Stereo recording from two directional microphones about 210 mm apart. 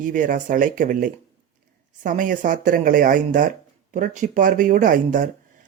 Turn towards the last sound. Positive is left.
turn(degrees=-40)  # may be behind; listen again after turning